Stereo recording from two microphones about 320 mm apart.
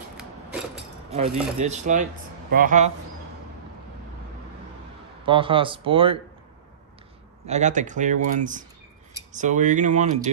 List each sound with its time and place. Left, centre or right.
1.1 s speech: right
5.2 s speech: centre
7.4 s speech: right